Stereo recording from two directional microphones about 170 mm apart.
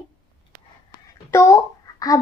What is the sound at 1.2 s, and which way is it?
Speech, 15° left (ahead or behind).